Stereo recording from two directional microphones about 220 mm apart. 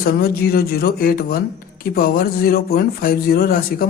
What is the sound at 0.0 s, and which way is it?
Speech, 45° left (ahead or behind).